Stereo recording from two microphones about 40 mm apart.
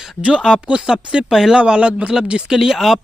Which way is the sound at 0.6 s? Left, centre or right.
Right.